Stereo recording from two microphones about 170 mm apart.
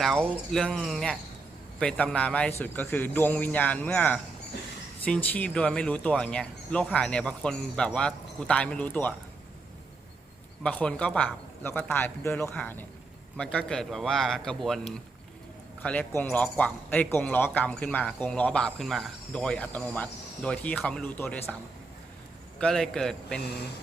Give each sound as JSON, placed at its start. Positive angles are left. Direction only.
{"t": 0.0, "sound": "speech", "side_deg": 0}
{"t": 10.6, "sound": "speech", "side_deg": 5}
{"t": 22.5, "sound": "speech", "side_deg": 5}
{"t": 23.4, "sound": "speech", "side_deg": 70}